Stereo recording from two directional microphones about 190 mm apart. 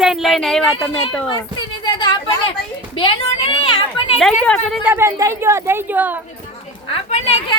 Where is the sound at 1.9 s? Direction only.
20° left (ahead or behind).